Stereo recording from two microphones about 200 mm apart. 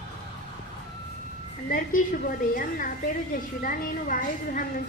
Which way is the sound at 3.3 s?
45° left (ahead or behind).